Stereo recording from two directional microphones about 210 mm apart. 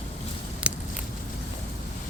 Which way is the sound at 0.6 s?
5° right (ahead or behind).